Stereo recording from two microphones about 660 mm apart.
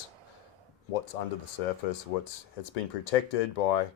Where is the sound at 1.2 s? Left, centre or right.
Left.